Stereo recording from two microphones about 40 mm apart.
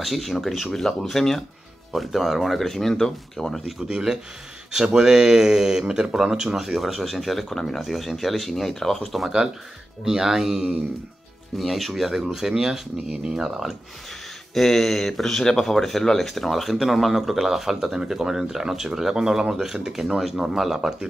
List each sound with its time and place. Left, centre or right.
0.0 s speech: centre
0.7 s speech: centre
3.6 s speech: centre
10.0 s speech: centre
13.4 s speech: centre
14.5 s speech: centre